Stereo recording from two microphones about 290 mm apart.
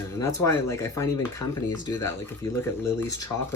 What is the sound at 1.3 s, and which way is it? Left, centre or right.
Speech, left.